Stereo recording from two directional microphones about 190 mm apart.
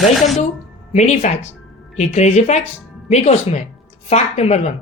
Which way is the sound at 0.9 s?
35° left (ahead or behind).